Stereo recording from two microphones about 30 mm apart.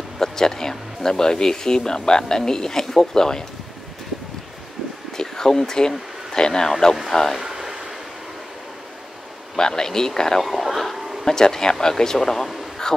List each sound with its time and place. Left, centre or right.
0.2 s speech: centre
5.1 s speech: centre
7.1 s speech: centre
7.4 s a sound: centre
9.6 s speech: left
10.4 s speech: centre
11.2 s speech: centre
12.9 s a sound: centre